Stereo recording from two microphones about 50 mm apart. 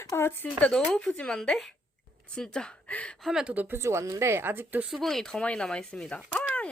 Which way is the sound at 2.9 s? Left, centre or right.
Left.